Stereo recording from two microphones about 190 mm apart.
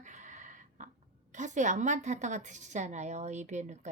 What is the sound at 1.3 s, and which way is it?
Speech, 40° right (ahead or behind).